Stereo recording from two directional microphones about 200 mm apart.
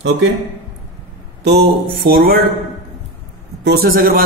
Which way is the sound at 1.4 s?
55° right (ahead or behind).